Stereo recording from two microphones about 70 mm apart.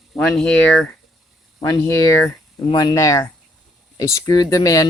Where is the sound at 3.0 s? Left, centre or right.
Left.